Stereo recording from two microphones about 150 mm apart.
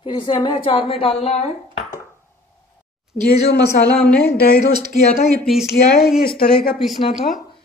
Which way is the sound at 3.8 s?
10° left (ahead or behind).